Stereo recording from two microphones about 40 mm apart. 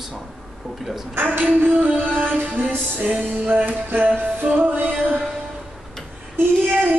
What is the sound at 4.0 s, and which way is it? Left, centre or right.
Music, right.